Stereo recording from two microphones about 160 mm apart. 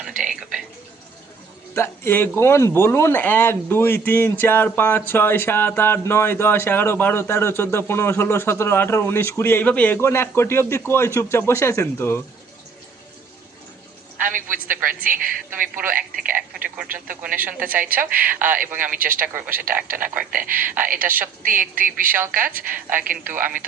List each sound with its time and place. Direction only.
0.2 s speech: 5° right (ahead or behind)
1.7 s speech: 15° left (ahead or behind)
14.2 s a sound: 55° right (ahead or behind)
14.8 s a woman's voice: 60° right (ahead or behind)
15.9 s radio: 60° right (ahead or behind)
17.6 s a woman's voice: 60° right (ahead or behind)
18.3 s a woman's voice: 10° right (ahead or behind)
18.9 s a woman's voice: 60° right (ahead or behind)
19.2 s a woman's voice: 15° right (ahead or behind)
19.5 s a woman's voice: 60° right (ahead or behind)
22.1 s a woman's voice: 10° right (ahead or behind)
22.4 s a woman's voice: 60° right (ahead or behind)